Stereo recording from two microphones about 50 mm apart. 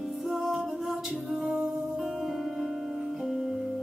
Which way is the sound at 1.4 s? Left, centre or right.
Centre.